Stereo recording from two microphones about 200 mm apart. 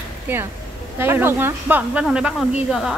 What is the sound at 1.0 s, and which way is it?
A woman's voice, 10° right (ahead or behind).